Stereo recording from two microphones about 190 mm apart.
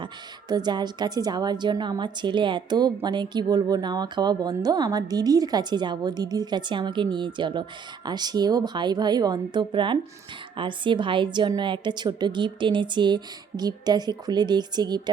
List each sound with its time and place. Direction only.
0.0 s a woman's voice: 20° right (ahead or behind)